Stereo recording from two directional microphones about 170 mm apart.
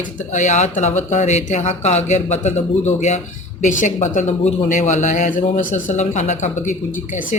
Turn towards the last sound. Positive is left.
turn(degrees=45)  # may be behind; listen again after turning